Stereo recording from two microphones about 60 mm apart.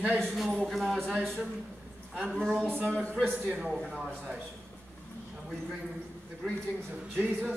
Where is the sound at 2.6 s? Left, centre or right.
Right.